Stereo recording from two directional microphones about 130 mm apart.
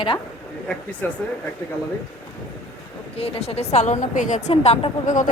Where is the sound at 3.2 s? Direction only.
45° left (ahead or behind).